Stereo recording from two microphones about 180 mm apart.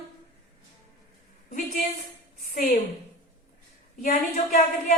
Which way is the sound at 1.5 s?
50° left (ahead or behind).